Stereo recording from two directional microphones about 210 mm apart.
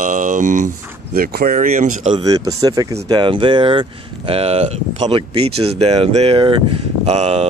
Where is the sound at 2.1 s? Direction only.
15° right (ahead or behind).